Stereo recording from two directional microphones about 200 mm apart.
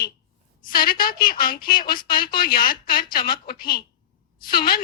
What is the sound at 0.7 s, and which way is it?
A woman's voice, 45° left (ahead or behind).